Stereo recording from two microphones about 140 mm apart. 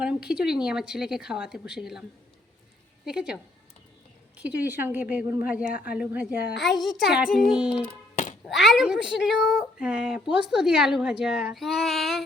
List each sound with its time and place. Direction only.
0.0 s speech: 5° right (ahead or behind)
4.4 s a woman's voice: 10° right (ahead or behind)
6.6 s speech: centre (ahead or behind)
8.1 s a sound: 60° left (ahead or behind)
8.4 s speech: centre (ahead or behind)